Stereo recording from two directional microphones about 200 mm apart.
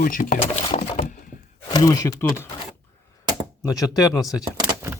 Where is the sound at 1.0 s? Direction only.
40° left (ahead or behind).